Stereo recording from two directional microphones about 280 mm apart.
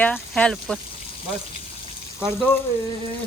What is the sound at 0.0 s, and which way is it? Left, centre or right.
Speech, centre.